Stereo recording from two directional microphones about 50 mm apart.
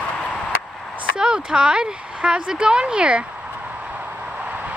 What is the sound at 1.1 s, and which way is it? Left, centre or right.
Speech, centre.